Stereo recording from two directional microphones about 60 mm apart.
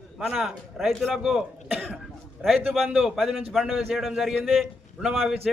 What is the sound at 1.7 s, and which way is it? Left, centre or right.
Speech, right.